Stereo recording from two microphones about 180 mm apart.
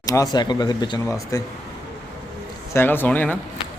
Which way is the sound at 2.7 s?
10° left (ahead or behind).